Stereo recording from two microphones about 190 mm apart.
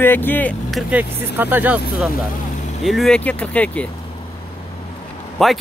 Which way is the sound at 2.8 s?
Centre (ahead or behind).